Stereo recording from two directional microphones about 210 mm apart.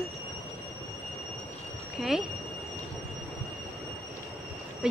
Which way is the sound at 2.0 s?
Centre (ahead or behind).